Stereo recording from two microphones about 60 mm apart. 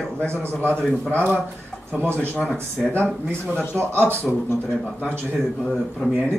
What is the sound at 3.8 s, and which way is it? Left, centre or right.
Speech, right.